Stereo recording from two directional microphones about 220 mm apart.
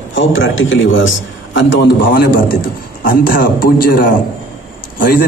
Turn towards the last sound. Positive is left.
turn(degrees=40)  # may be behind; listen again after turning